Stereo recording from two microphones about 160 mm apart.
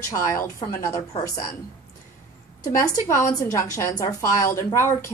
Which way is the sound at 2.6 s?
20° left (ahead or behind).